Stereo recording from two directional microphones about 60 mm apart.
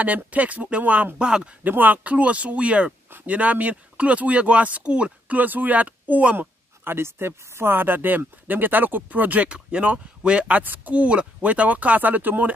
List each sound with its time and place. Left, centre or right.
0.0 s speech: right
1.6 s speech: right
6.8 s speech: right